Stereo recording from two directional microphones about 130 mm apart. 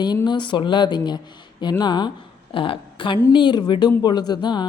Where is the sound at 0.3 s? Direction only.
35° left (ahead or behind).